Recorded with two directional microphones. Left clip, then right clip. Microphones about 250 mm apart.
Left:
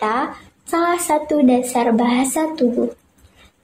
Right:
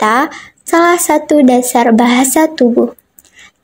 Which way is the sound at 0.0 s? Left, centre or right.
Right.